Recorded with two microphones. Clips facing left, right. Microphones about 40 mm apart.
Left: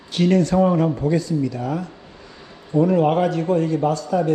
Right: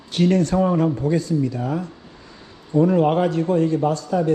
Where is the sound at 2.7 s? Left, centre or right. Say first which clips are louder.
Even; left.